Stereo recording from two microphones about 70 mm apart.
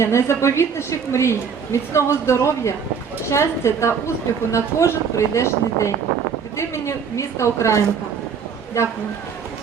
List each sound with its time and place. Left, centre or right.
0.0 s a woman's voice: left